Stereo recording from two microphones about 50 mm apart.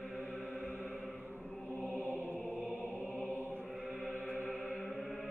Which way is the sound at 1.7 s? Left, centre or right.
Centre.